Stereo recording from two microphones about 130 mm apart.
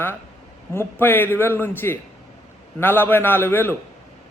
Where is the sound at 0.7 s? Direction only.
15° left (ahead or behind).